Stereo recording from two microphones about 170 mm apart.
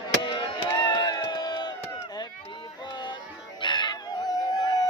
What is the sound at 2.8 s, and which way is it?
Music, 25° left (ahead or behind).